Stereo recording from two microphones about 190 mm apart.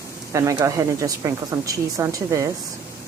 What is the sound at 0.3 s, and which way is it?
Speech, 15° right (ahead or behind).